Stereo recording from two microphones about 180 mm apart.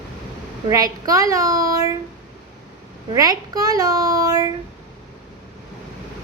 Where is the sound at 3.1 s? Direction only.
20° right (ahead or behind).